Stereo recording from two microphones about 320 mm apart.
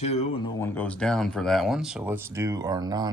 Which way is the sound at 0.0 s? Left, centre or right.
Centre.